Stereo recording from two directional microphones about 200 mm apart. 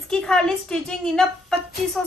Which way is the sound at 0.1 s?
5° left (ahead or behind).